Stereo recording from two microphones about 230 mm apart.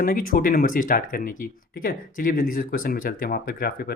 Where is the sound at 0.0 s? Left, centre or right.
Left.